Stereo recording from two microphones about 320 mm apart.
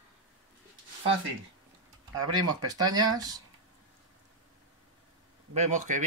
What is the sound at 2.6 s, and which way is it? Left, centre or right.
Speech, centre.